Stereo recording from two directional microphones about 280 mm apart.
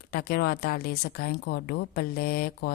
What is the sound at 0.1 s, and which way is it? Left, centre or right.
Speech, left.